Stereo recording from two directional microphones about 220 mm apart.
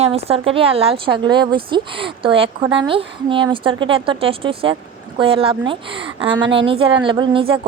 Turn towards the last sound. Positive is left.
turn(degrees=-25)  # may be behind; listen again after turning